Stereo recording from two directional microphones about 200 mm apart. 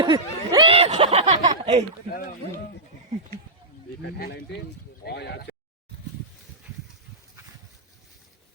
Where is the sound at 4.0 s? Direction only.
50° left (ahead or behind).